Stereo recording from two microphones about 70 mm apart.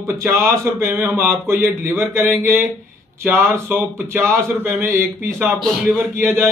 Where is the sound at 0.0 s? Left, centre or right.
Right.